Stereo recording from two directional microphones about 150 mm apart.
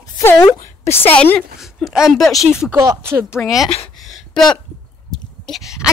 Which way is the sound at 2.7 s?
20° right (ahead or behind).